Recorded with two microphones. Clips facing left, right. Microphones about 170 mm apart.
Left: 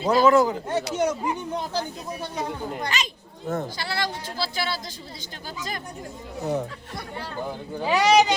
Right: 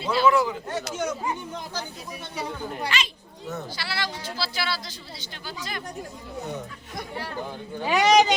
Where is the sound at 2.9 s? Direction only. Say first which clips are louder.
Even; 45° left (ahead or behind).